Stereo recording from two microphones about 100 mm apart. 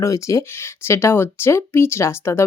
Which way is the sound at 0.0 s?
30° left (ahead or behind).